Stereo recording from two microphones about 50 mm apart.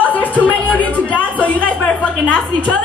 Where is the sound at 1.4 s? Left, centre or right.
Left.